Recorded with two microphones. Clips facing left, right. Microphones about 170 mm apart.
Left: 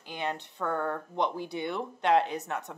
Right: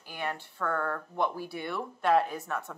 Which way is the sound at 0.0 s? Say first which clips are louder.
Left 2 dB; 20° left (ahead or behind).